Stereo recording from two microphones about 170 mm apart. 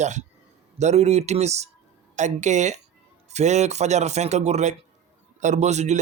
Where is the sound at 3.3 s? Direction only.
40° right (ahead or behind).